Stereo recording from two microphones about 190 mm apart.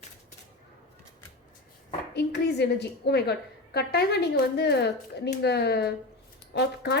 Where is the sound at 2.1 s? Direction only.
65° left (ahead or behind).